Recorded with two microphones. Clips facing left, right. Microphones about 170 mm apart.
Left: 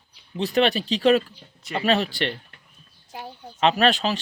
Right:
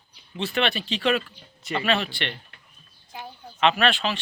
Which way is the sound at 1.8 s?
40° left (ahead or behind).